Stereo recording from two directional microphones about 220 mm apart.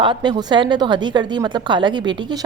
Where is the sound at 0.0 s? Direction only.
20° right (ahead or behind).